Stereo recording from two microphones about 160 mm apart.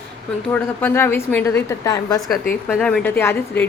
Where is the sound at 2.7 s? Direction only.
5° left (ahead or behind).